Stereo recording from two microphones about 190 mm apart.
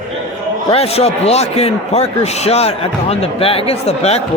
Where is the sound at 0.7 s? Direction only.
30° left (ahead or behind).